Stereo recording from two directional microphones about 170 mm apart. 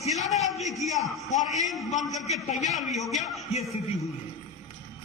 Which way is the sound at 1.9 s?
40° left (ahead or behind).